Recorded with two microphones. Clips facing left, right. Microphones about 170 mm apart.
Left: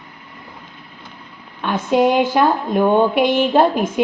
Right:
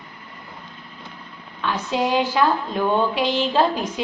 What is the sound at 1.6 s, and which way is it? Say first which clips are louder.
A woman's voice: left 7 dB; 55° left (ahead or behind).